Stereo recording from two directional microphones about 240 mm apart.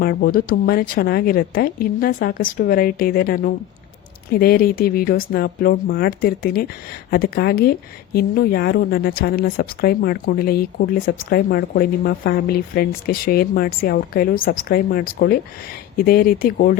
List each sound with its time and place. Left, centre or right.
0.0 s a woman's voice: left